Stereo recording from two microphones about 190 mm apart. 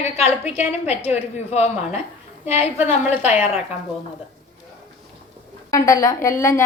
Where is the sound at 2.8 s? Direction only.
10° right (ahead or behind).